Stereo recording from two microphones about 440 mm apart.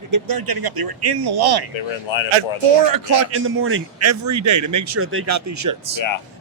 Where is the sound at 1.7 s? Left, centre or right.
Left.